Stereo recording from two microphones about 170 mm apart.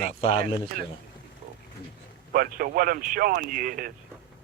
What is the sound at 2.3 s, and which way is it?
A man's voice, 60° right (ahead or behind).